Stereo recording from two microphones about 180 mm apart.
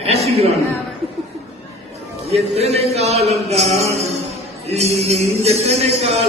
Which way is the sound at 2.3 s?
35° right (ahead or behind).